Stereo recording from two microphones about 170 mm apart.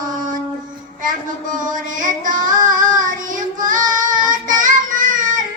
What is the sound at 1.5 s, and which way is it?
Child singing, 50° right (ahead or behind).